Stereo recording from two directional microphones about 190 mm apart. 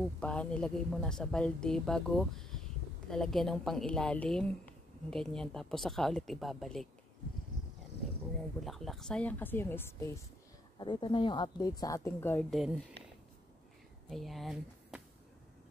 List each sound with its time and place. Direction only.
0.2 s speech: 5° left (ahead or behind)
8.6 s speech: centre (ahead or behind)
10.8 s a woman's voice: 25° left (ahead or behind)
12.4 s speech: centre (ahead or behind)
14.0 s speech: centre (ahead or behind)